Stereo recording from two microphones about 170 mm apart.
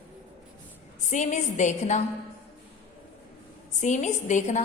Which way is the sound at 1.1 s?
45° left (ahead or behind).